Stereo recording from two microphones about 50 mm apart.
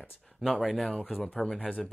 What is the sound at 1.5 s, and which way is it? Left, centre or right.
Speech, left.